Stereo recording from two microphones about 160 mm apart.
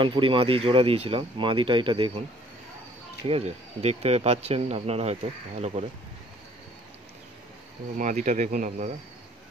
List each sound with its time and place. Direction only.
0.0 s speech: 30° right (ahead or behind)
3.3 s speech: 40° right (ahead or behind)
8.0 s speech: 50° right (ahead or behind)